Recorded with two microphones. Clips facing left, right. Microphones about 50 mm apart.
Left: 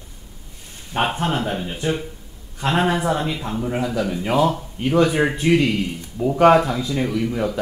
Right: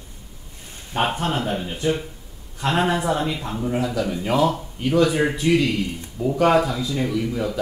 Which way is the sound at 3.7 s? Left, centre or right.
Centre.